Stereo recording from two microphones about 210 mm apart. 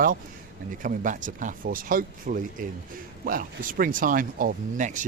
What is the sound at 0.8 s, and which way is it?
Speech, 40° right (ahead or behind).